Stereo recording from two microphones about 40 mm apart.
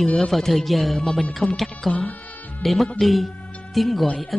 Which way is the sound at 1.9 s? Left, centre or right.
Left.